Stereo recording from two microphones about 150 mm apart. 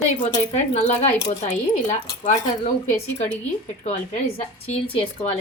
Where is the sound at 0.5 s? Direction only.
50° left (ahead or behind).